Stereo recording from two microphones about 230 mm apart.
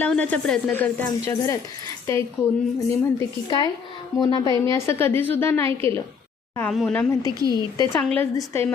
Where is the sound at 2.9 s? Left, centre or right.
Centre.